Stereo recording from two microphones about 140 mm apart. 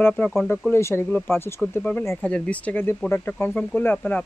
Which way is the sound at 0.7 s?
20° left (ahead or behind).